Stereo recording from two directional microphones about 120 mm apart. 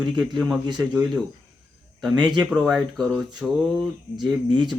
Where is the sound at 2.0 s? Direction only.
35° right (ahead or behind).